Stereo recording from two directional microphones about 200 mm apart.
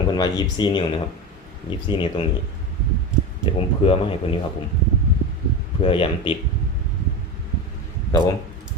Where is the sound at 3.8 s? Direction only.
30° left (ahead or behind).